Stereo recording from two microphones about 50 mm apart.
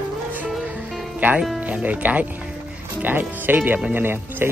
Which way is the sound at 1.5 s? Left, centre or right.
Right.